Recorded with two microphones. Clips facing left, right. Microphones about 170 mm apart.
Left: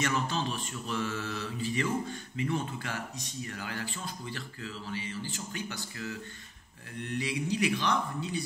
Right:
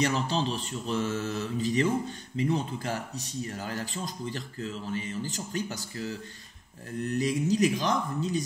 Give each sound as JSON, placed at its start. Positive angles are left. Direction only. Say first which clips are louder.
{"t": 0.0, "sound": "a man's voice", "louder": "right 4 dB", "side_deg": -35}